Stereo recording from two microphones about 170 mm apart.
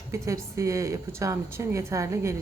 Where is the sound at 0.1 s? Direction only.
15° right (ahead or behind).